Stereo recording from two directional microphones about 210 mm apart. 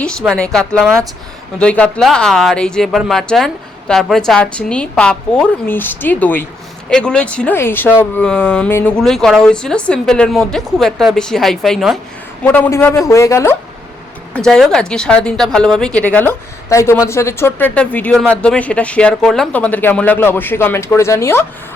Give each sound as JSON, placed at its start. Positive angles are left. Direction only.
{"t": 0.0, "sound": "speech", "side_deg": 5}
{"t": 14.3, "sound": "speech", "side_deg": 5}